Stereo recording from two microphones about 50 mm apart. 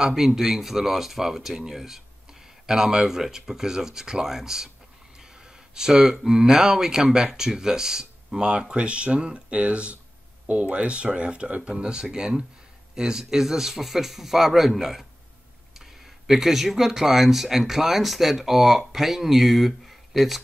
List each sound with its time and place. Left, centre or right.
0.0 s speech: centre
5.8 s speech: centre
16.3 s speech: centre